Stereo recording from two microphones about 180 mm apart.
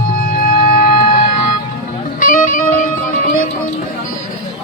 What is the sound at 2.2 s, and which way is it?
Music, 50° left (ahead or behind).